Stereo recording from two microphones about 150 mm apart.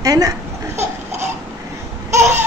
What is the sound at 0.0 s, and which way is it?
Speech, 25° right (ahead or behind).